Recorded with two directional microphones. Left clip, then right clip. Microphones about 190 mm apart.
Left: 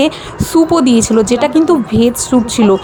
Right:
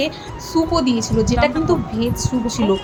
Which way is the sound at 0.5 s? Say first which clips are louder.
Left 8 dB; 40° left (ahead or behind).